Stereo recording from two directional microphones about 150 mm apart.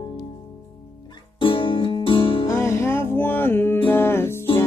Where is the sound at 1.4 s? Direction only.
35° left (ahead or behind).